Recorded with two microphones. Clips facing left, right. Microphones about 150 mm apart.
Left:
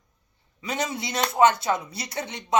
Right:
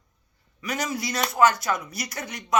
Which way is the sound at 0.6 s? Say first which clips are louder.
Even; 25° left (ahead or behind).